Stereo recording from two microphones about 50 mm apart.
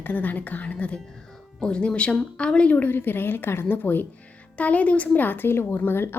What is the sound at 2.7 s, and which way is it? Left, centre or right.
A woman's voice, left.